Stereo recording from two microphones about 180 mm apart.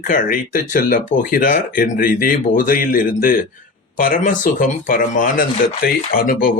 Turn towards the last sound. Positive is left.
turn(degrees=55)  # may be behind; listen again after turning